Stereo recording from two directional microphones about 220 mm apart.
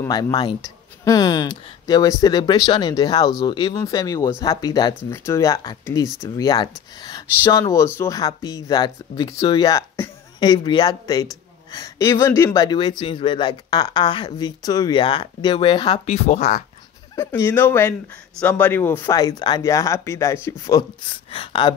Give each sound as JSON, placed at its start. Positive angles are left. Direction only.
{"t": 0.0, "sound": "speech", "side_deg": 15}
{"t": 16.1, "sound": "speech", "side_deg": 30}
{"t": 17.1, "sound": "speech", "side_deg": 10}